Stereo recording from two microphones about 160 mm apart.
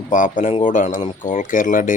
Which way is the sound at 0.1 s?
50° left (ahead or behind).